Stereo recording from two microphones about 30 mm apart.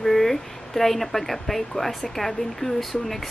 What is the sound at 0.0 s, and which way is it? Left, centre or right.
Speech, centre.